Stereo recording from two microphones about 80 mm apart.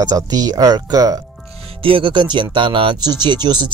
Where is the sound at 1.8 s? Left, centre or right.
Right.